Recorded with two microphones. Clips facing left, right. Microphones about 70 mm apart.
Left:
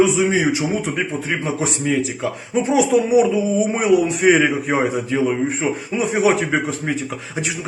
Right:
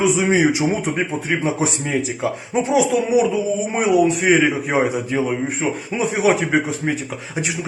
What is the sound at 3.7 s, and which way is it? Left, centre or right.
Speech, centre.